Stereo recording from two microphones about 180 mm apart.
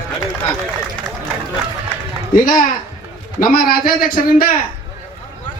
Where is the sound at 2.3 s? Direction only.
50° left (ahead or behind).